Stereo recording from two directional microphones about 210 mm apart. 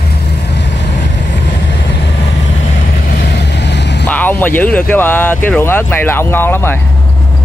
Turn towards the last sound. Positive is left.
turn(degrees=10)  # may be behind; listen again after turning